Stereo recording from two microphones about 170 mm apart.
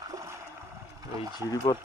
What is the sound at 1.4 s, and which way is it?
Speech, 20° left (ahead or behind).